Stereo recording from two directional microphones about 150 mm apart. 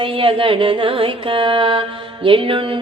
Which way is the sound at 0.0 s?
35° right (ahead or behind).